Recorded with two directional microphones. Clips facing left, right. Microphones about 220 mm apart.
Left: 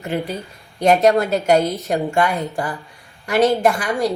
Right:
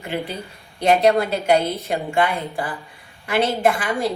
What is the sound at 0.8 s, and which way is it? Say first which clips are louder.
Speech: left 2 dB; 45° left (ahead or behind).